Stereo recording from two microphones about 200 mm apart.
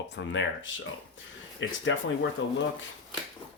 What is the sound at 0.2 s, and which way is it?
Speech, 70° left (ahead or behind).